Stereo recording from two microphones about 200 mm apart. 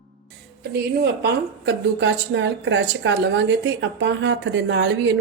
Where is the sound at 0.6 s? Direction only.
55° right (ahead or behind).